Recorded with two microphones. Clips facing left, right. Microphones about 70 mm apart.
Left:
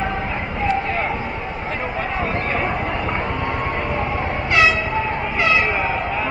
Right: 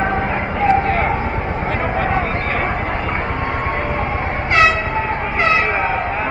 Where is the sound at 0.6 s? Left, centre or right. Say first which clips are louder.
Right 6 dB; right.